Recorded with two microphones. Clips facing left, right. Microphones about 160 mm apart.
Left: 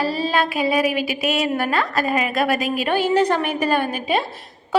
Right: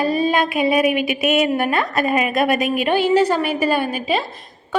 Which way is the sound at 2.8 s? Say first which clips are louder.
Right 2 dB; 15° right (ahead or behind).